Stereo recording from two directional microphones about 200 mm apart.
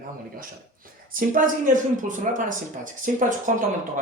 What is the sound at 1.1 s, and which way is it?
Speech, 45° right (ahead or behind).